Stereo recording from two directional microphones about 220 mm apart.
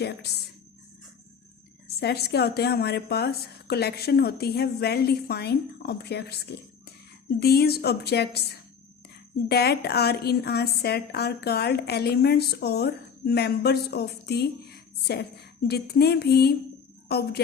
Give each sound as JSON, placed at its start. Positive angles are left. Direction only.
{"t": 2.0, "sound": "a woman's voice", "side_deg": 45}